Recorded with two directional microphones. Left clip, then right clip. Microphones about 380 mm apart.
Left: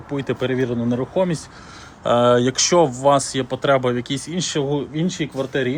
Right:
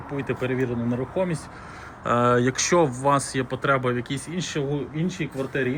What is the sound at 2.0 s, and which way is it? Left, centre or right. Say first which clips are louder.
Speech: left 5 dB; centre.